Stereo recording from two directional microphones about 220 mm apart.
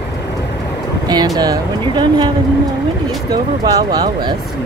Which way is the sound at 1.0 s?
20° right (ahead or behind).